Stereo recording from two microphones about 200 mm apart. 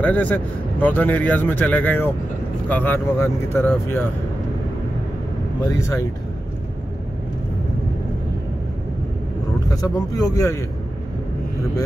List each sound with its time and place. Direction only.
0.0 s speech: 10° left (ahead or behind)
5.6 s speech: 15° left (ahead or behind)
9.8 s speech: 15° left (ahead or behind)